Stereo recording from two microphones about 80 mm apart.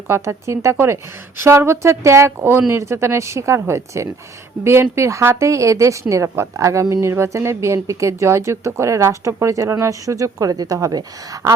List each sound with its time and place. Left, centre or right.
0.1 s speech: right